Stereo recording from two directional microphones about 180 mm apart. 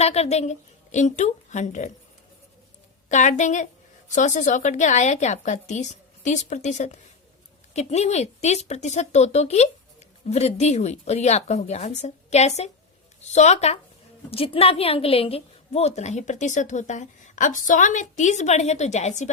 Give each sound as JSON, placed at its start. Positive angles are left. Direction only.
{"t": 0.0, "sound": "a woman's voice", "side_deg": 35}
{"t": 3.1, "sound": "a woman's voice", "side_deg": 40}